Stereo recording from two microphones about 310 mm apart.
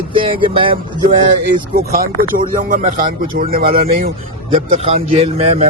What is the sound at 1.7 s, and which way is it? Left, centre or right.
A man's voice, right.